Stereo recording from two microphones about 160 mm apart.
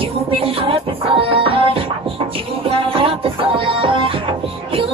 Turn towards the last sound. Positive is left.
turn(degrees=-35)  # may be behind; listen again after turning